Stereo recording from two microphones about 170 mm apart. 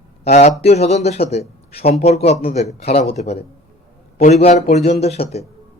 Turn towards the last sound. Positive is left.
turn(degrees=35)  # may be behind; listen again after turning